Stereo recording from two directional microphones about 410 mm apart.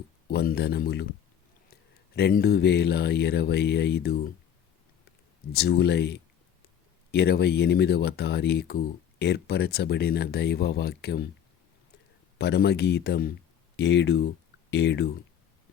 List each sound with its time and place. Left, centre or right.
0.3 s speech: left
2.1 s speech: left
5.5 s speech: left
12.4 s speech: left